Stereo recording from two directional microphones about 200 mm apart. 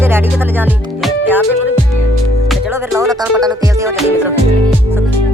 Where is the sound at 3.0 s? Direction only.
20° right (ahead or behind).